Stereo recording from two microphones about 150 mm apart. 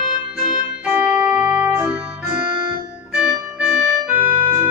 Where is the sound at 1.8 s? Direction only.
10° right (ahead or behind).